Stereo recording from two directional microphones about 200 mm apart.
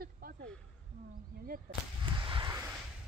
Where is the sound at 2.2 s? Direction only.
25° right (ahead or behind).